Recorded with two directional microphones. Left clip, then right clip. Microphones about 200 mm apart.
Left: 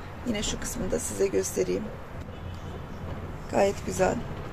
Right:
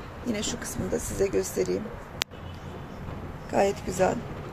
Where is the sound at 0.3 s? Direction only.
5° right (ahead or behind).